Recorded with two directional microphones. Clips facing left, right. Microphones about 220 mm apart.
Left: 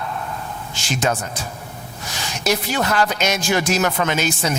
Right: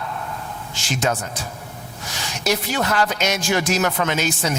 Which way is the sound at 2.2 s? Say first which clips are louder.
Left 1 dB; 10° left (ahead or behind).